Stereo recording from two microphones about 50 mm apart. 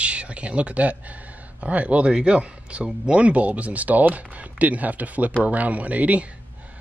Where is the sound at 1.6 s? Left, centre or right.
Right.